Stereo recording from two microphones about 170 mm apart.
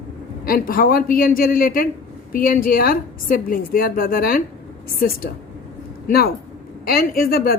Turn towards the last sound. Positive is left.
turn(degrees=60)  # may be behind; listen again after turning